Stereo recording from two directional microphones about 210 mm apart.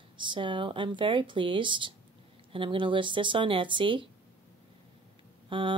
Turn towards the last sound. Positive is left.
turn(degrees=-25)  # may be behind; listen again after turning